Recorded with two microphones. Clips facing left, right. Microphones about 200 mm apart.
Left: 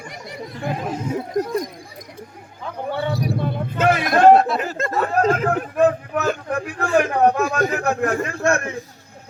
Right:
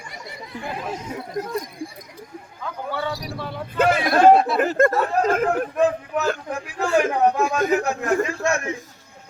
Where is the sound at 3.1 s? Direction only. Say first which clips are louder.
Left 7 dB; 55° left (ahead or behind).